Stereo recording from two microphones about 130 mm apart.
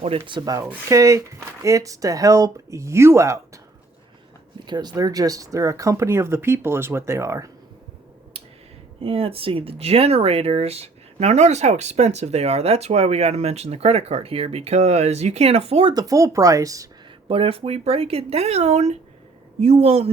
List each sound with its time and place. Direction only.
0.0 s speech: 45° right (ahead or behind); by 3.4 s 20° right (ahead or behind)
4.6 s speech: 35° right (ahead or behind)
9.0 s speech: 50° right (ahead or behind); by 16.9 s 25° right (ahead or behind)
17.2 s speech: 45° right (ahead or behind)